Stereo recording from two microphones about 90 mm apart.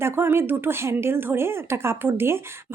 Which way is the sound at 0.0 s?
25° right (ahead or behind).